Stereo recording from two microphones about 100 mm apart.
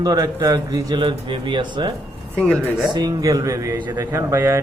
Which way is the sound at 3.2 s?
35° right (ahead or behind).